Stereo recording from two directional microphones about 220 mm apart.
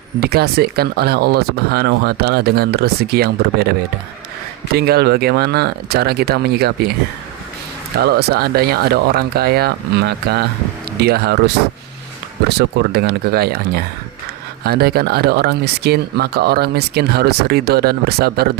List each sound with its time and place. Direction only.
0.2 s speech: 45° right (ahead or behind)
7.9 s speech: 45° right (ahead or behind)
12.5 s speech: 45° right (ahead or behind)